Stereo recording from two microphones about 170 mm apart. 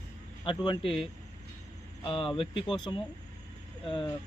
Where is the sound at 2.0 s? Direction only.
30° left (ahead or behind).